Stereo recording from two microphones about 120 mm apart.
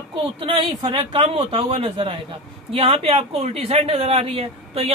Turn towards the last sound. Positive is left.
turn(degrees=-55)  # may be behind; listen again after turning